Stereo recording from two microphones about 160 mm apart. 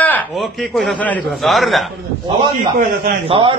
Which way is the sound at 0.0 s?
10° left (ahead or behind).